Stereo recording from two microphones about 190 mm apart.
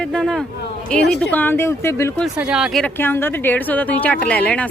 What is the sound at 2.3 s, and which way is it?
Speech, 5° right (ahead or behind).